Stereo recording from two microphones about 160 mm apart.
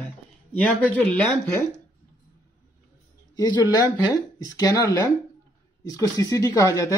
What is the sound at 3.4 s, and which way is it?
Speech, 25° left (ahead or behind).